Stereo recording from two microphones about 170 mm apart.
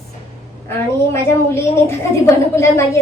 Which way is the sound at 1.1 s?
15° left (ahead or behind).